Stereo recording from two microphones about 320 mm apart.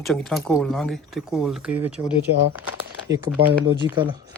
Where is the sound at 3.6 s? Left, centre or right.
Centre.